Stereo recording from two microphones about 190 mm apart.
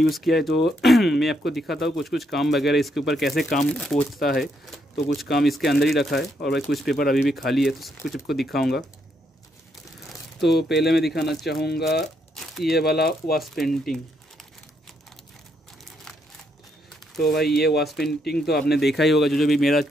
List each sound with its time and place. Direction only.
0.0 s speech: centre (ahead or behind)
10.4 s speech: centre (ahead or behind)
11.0 s speech: 60° left (ahead or behind)
12.4 s crumpling: centre (ahead or behind)
12.7 s speech: 55° left (ahead or behind)
13.4 s speech: centre (ahead or behind)
17.2 s speech: 55° left (ahead or behind)
18.9 s speech: centre (ahead or behind)